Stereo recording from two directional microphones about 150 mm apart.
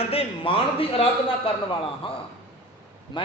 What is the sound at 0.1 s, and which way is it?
Speech, 40° left (ahead or behind).